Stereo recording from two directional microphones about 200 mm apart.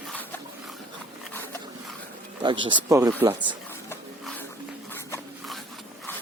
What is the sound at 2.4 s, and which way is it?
Speech, 25° right (ahead or behind).